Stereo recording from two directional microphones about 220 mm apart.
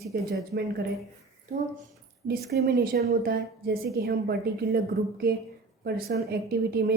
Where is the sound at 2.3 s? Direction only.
45° right (ahead or behind).